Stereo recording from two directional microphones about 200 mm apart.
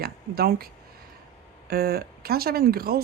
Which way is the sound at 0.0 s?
50° right (ahead or behind).